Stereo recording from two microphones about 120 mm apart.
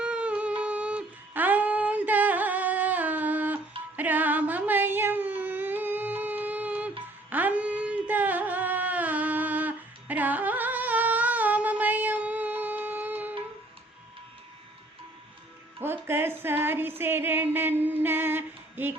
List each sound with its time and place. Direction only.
0.0 s a sound: 10° right (ahead or behind)
7.3 s music: 15° right (ahead or behind)
15.8 s music: 20° right (ahead or behind)